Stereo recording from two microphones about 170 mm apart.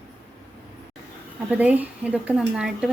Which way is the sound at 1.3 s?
10° right (ahead or behind).